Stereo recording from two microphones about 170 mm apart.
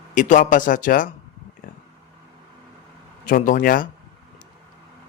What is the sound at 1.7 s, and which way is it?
Vehicle, 55° left (ahead or behind).